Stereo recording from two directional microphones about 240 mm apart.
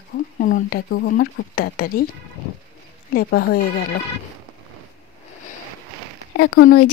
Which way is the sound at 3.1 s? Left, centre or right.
Left.